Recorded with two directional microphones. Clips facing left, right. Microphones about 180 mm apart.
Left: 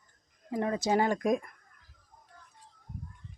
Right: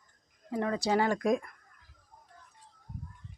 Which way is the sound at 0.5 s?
20° left (ahead or behind).